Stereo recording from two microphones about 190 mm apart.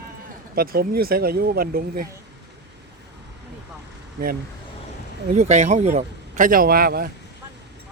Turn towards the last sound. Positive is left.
turn(degrees=-50)  # may be behind; listen again after turning